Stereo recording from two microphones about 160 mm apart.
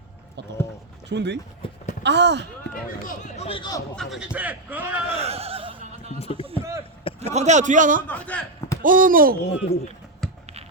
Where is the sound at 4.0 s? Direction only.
Centre (ahead or behind).